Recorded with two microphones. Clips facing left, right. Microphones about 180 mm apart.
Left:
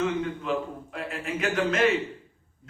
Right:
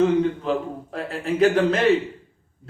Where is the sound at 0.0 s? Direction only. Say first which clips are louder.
Right 8 dB; 35° right (ahead or behind).